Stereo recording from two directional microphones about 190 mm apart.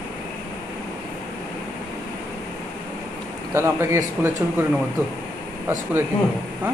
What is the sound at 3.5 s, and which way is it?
Speech, 15° right (ahead or behind).